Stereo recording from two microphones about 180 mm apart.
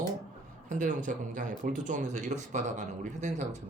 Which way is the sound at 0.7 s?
45° right (ahead or behind).